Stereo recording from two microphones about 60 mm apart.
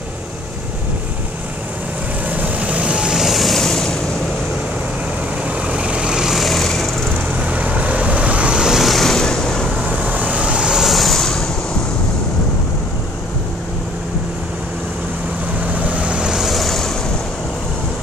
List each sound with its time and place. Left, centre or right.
2.2 s vehicle: right; by 4.0 s centre
5.7 s vehicle: centre
7.3 s vehicle: right; by 9.7 s centre
10.0 s vehicle: right; by 11.4 s centre
15.6 s vehicle: right; by 16.9 s centre